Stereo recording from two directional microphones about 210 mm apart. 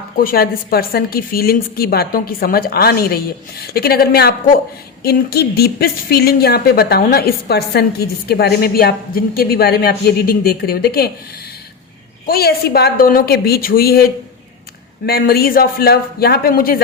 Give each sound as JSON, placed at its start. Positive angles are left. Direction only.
{"t": 0.2, "sound": "a woman's voice", "side_deg": 45}
{"t": 12.2, "sound": "a woman's voice", "side_deg": 45}